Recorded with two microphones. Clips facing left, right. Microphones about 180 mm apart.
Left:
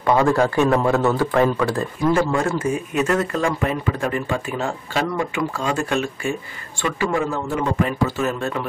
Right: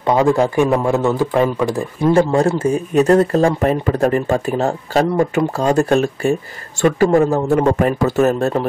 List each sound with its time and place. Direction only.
0.0 s speech: 20° right (ahead or behind)
2.1 s speech: 35° right (ahead or behind)